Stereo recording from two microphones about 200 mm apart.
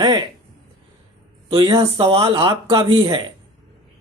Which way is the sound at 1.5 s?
20° right (ahead or behind).